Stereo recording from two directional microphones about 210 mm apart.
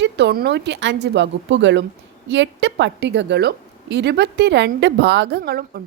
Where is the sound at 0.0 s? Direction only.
55° right (ahead or behind).